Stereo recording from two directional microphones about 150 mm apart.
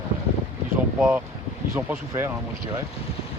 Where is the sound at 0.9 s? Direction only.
10° right (ahead or behind).